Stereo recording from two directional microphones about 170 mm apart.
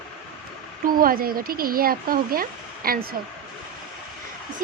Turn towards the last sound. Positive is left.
turn(degrees=-60)  # may be behind; listen again after turning